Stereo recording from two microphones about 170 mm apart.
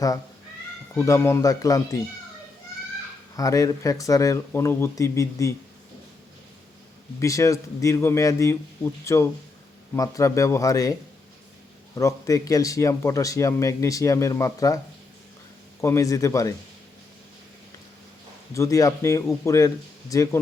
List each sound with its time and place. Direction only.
0.9 s speech: 15° left (ahead or behind)
3.3 s speech: 20° left (ahead or behind)
7.2 s a man's voice: 20° left (ahead or behind)
11.9 s speech: 20° left (ahead or behind)
15.8 s speech: 15° left (ahead or behind)
18.5 s a man's voice: 20° left (ahead or behind)